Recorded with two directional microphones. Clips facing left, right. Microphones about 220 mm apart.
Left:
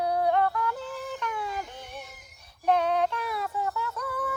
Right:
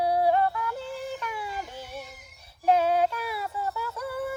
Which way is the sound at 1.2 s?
10° right (ahead or behind).